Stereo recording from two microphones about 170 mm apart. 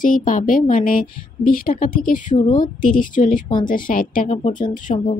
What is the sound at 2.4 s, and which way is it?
Speech, 25° left (ahead or behind).